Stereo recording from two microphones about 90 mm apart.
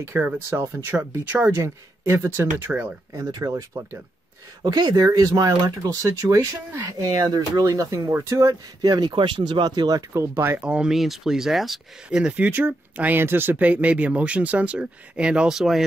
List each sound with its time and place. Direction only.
0.0 s speech: 30° right (ahead or behind)
3.1 s speech: 45° right (ahead or behind)
4.6 s speech: 50° right (ahead or behind)
9.1 s speech: 65° right (ahead or behind); by 10.6 s 30° right (ahead or behind)
10.6 s speech: 10° right (ahead or behind)